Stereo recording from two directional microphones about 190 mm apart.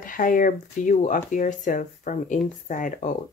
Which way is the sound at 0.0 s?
45° left (ahead or behind).